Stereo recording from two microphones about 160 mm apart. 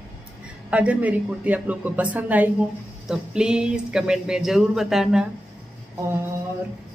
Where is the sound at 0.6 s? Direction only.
10° right (ahead or behind).